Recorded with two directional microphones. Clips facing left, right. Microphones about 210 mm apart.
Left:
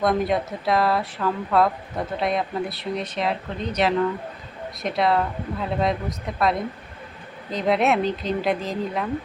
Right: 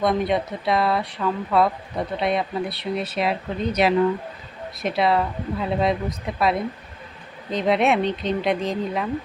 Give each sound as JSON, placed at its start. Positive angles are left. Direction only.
{"t": 0.0, "sound": "speech", "side_deg": 0}